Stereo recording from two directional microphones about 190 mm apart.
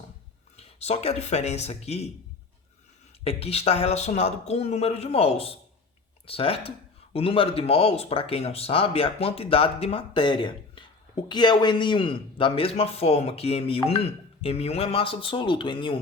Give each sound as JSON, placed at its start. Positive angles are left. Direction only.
{"t": 0.5, "sound": "speech", "side_deg": 35}
{"t": 3.2, "sound": "a man's voice", "side_deg": 30}